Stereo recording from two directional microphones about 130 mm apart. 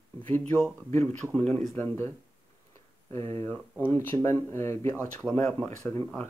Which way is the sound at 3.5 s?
15° left (ahead or behind).